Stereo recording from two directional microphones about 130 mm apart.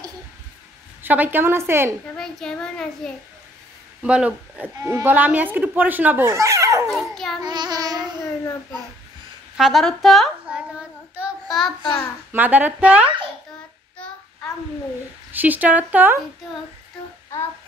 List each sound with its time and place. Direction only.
1.0 s a woman's voice: 15° right (ahead or behind)
2.1 s a child's voice: 5° left (ahead or behind)
4.0 s speech: 10° right (ahead or behind)
4.7 s speech: 20° right (ahead or behind)
6.9 s speech: centre (ahead or behind)
7.4 s child singing: 30° right (ahead or behind)
9.6 s child singing: centre (ahead or behind)
12.3 s speech: 15° right (ahead or behind)
15.3 s speech: 15° right (ahead or behind)